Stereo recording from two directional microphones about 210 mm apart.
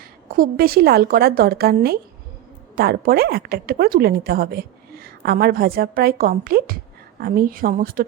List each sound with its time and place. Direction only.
0.0 s a woman's voice: 40° right (ahead or behind)